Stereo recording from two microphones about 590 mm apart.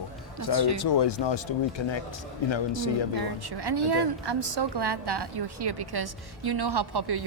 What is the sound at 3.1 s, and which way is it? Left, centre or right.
A woman's voice, right.